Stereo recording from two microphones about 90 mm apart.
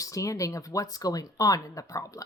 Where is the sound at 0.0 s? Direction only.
35° left (ahead or behind).